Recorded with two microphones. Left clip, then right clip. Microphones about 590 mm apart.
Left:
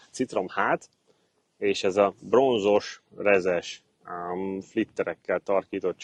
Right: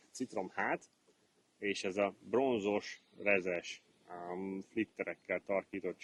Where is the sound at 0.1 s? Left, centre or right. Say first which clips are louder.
Left 13 dB; left.